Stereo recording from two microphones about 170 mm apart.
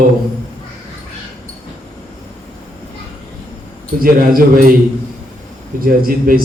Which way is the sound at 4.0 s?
55° right (ahead or behind).